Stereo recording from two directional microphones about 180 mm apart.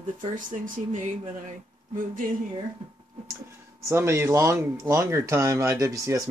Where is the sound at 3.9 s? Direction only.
15° right (ahead or behind).